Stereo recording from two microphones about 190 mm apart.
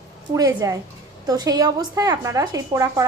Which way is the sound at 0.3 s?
20° right (ahead or behind).